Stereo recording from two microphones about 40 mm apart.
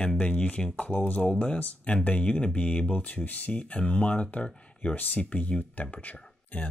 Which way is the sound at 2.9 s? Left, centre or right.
Left.